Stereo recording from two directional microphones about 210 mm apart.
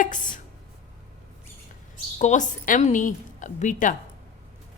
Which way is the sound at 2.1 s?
35° left (ahead or behind).